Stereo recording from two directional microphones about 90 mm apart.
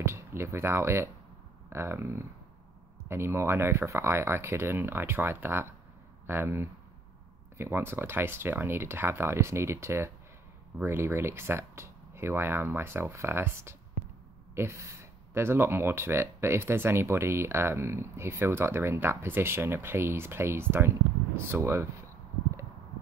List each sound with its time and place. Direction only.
0.0 s speech: 30° right (ahead or behind)